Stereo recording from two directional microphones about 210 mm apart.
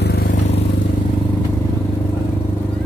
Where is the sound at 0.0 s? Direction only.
45° left (ahead or behind).